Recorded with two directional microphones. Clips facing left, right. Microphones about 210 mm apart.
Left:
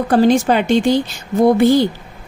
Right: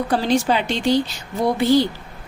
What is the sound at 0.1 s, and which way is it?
Speech, 50° left (ahead or behind).